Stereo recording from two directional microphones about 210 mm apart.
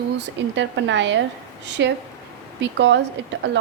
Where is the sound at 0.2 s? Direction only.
60° right (ahead or behind).